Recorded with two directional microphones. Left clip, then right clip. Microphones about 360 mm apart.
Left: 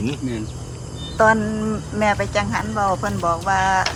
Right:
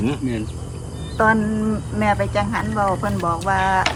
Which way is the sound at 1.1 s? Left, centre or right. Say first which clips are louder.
Left 2 dB; centre.